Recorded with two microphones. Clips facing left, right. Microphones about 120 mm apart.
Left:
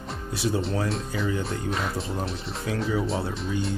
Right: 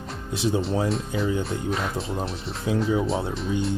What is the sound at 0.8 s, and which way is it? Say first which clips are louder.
Speech: right 3 dB; centre (ahead or behind).